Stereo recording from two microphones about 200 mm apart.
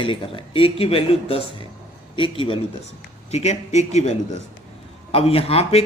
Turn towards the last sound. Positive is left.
turn(degrees=30)  # may be behind; listen again after turning